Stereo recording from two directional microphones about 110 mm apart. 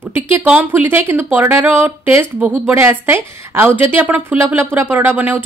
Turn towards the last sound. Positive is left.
turn(degrees=-15)  # may be behind; listen again after turning